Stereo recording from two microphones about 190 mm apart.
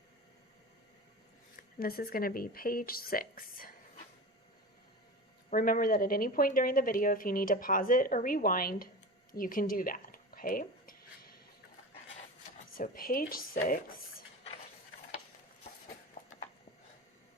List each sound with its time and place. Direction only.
1.5 s a woman's voice: 50° left (ahead or behind)
5.5 s a woman's voice: 45° left (ahead or behind)
9.3 s a sound: 50° left (ahead or behind)
12.7 s a woman's voice: 50° left (ahead or behind)